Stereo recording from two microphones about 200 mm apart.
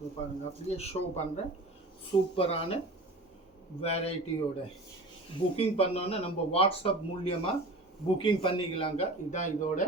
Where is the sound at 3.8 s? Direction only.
30° left (ahead or behind).